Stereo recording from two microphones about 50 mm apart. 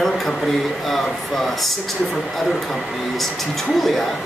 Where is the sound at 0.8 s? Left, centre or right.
Centre.